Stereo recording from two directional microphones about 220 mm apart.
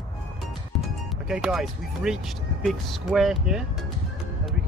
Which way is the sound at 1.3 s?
5° right (ahead or behind).